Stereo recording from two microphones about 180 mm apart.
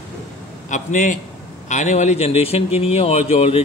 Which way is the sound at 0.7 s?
45° left (ahead or behind).